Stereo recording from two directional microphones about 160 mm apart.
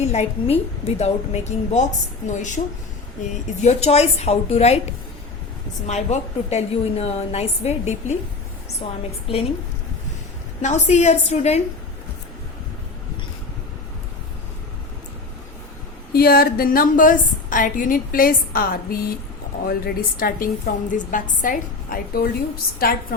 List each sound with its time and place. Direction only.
0.0 s a woman's voice: 40° left (ahead or behind)
5.8 s a woman's voice: 45° left (ahead or behind)
10.6 s a woman's voice: 45° left (ahead or behind)
16.1 s a woman's voice: 70° left (ahead or behind)